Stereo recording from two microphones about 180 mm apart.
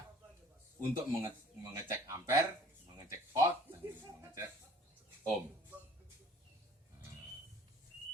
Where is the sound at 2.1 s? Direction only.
15° right (ahead or behind).